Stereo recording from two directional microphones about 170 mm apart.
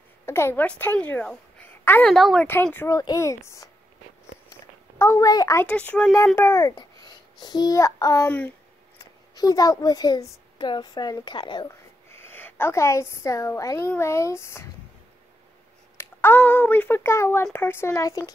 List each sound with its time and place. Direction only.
0.3 s a woman's voice: 15° left (ahead or behind)
4.5 s a sound: 15° left (ahead or behind)
5.7 s a child's voice: 5° left (ahead or behind); by 11.7 s 25° left (ahead or behind)
12.1 s a woman's voice: 15° left (ahead or behind)
16.0 s speech: 15° left (ahead or behind)